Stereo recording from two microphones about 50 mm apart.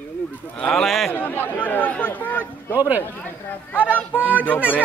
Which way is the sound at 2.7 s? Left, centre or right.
Right.